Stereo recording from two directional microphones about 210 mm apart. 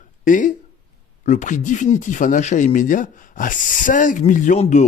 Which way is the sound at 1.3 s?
35° left (ahead or behind).